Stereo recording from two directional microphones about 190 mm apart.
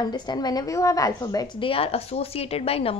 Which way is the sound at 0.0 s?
20° left (ahead or behind).